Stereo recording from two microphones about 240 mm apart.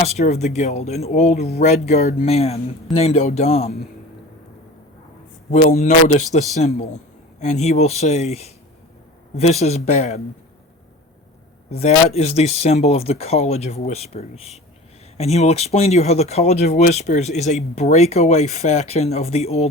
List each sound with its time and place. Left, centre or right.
0.0 s speech: left
5.5 s speech: left
11.7 s speech: left